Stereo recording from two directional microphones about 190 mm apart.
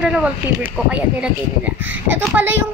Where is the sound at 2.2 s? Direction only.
10° right (ahead or behind).